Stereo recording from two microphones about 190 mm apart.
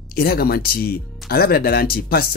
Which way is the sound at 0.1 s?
55° left (ahead or behind).